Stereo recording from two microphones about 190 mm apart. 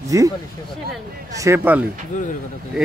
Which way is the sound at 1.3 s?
15° right (ahead or behind).